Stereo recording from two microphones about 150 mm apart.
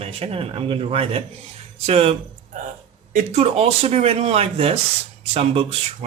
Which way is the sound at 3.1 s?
45° right (ahead or behind).